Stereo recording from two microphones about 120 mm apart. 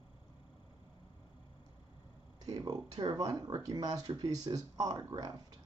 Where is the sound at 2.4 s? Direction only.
30° right (ahead or behind).